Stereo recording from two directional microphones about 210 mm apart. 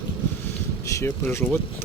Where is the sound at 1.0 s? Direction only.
10° left (ahead or behind).